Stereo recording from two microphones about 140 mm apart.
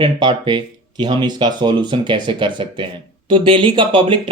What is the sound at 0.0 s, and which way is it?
Speech, 35° right (ahead or behind).